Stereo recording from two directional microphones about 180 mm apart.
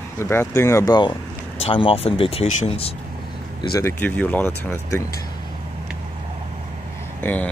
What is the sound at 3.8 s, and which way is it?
Speech, 10° left (ahead or behind).